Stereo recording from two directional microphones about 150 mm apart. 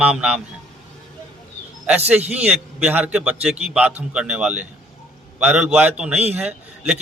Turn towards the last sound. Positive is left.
turn(degrees=-5)  # may be behind; listen again after turning